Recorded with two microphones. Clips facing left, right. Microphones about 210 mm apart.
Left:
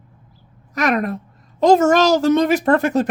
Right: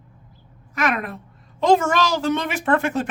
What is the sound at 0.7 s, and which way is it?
A woman's voice, 40° left (ahead or behind).